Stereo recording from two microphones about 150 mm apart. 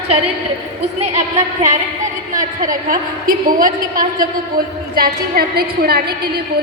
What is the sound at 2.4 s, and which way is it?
A woman's voice, 65° right (ahead or behind).